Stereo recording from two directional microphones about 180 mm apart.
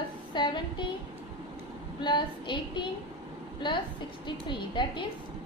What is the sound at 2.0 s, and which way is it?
A woman's voice, 25° left (ahead or behind).